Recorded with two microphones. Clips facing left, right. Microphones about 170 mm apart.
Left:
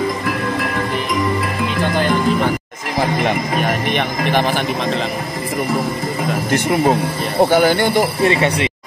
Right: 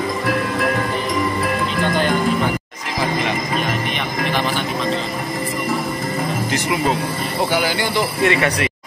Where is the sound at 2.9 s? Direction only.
55° left (ahead or behind).